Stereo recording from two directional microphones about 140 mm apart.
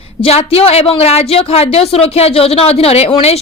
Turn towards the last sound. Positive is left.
turn(degrees=45)  # may be behind; listen again after turning